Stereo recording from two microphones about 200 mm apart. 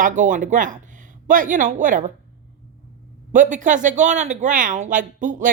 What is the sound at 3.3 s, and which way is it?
Speech, 40° right (ahead or behind).